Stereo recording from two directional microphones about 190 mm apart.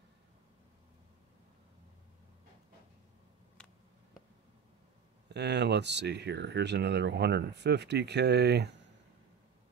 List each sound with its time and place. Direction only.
5.3 s speech: 65° right (ahead or behind)